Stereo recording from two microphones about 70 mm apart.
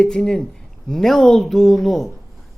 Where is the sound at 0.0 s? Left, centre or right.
Centre.